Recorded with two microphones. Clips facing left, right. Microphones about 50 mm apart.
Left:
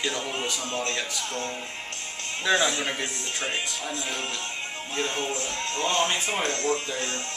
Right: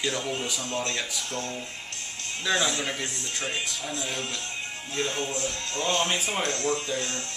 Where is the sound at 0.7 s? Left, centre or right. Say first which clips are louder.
Right 1 dB; left.